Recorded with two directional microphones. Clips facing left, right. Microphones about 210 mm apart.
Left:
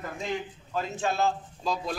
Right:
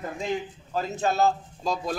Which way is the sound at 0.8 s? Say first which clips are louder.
Right 3 dB; 40° right (ahead or behind).